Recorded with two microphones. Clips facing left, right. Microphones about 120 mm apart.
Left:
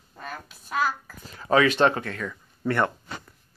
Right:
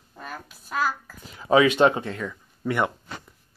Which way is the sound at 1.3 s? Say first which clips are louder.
Right 2 dB; 15° right (ahead or behind).